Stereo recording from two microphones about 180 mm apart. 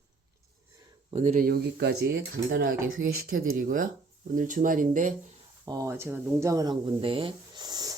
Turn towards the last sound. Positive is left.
turn(degrees=-20)  # may be behind; listen again after turning